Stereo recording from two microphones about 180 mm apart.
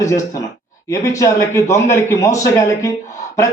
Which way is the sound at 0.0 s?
15° left (ahead or behind).